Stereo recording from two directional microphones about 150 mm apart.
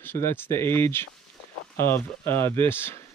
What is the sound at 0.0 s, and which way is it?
Speech, 15° left (ahead or behind).